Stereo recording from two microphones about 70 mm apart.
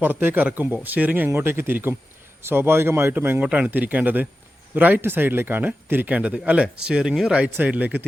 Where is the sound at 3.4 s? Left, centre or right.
Centre.